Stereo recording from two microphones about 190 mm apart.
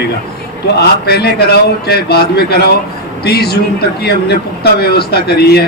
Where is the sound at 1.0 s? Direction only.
55° left (ahead or behind).